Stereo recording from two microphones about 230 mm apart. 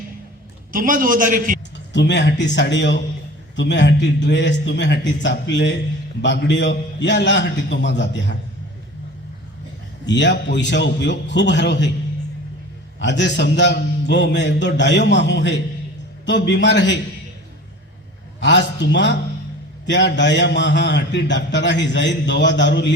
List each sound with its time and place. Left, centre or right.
0.7 s a man's voice: right
1.9 s a man's voice: left
10.1 s a man's voice: left
13.0 s a man's voice: left
18.3 s a man's voice: left